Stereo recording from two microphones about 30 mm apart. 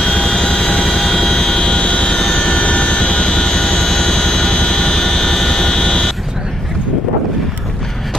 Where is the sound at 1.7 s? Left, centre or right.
Left.